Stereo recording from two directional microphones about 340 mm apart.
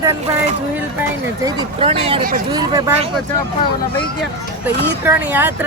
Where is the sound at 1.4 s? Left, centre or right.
Centre.